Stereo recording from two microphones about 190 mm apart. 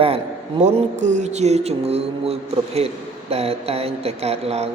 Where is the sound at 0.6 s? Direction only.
35° right (ahead or behind).